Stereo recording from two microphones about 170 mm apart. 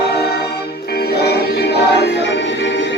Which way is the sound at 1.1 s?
70° left (ahead or behind).